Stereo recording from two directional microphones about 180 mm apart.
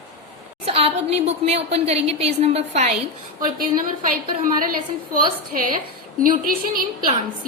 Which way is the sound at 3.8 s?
50° right (ahead or behind).